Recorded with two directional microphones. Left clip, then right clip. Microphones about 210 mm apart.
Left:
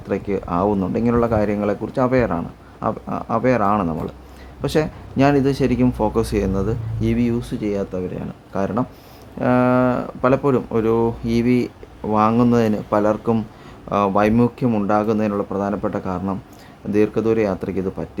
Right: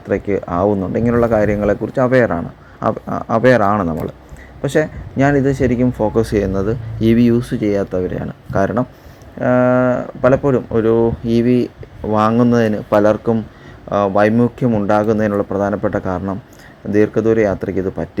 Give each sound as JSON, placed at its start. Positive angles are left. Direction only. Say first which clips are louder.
{"t": 0.1, "sound": "speech", "louder": "right 4 dB", "side_deg": -10}
{"t": 9.4, "sound": "speech", "louder": "right 4 dB", "side_deg": -5}